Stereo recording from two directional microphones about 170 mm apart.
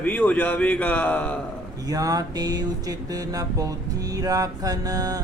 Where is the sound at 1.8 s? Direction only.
20° right (ahead or behind).